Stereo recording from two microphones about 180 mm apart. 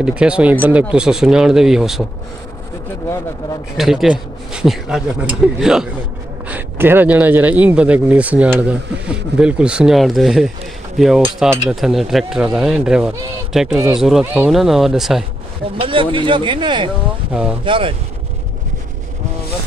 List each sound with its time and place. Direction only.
0.0 s speech: 5° right (ahead or behind)
3.7 s speech: centre (ahead or behind)
15.8 s speech: 30° right (ahead or behind)